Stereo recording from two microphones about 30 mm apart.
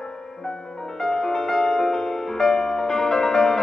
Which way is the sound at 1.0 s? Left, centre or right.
Centre.